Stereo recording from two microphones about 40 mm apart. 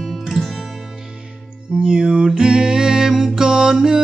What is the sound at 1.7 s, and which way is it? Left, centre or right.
Music, right.